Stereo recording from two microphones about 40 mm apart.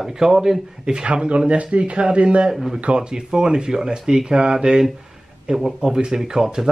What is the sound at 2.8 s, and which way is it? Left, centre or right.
Speech, right.